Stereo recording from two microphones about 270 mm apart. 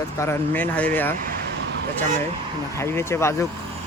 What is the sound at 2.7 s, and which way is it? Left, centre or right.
Speech, centre.